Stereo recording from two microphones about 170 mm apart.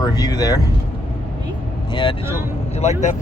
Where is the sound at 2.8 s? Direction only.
45° left (ahead or behind).